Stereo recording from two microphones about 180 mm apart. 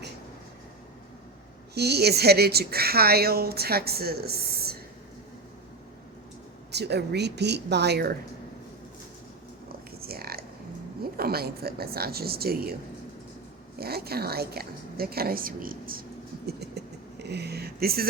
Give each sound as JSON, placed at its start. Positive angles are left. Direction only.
{"t": 1.7, "sound": "a woman's voice", "side_deg": -65}
{"t": 6.7, "sound": "speech", "side_deg": -65}
{"t": 10.0, "sound": "a sound", "side_deg": -55}
{"t": 11.0, "sound": "a woman's voice", "side_deg": -60}
{"t": 13.7, "sound": "a woman's voice", "side_deg": -60}
{"t": 16.5, "sound": "a sound", "side_deg": -65}